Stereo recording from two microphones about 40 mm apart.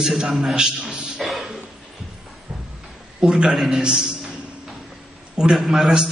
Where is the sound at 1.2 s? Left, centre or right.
Centre.